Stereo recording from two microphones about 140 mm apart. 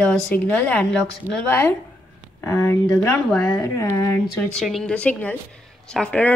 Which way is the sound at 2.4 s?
20° left (ahead or behind).